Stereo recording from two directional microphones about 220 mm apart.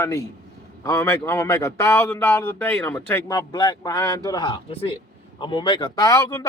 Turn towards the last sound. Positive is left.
turn(degrees=15)  # may be behind; listen again after turning